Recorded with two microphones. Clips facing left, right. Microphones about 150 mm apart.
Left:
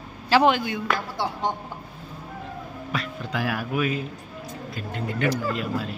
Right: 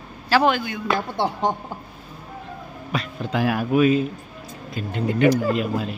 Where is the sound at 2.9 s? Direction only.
20° right (ahead or behind).